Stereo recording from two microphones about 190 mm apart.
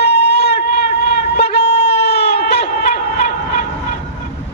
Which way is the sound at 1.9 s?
60° left (ahead or behind).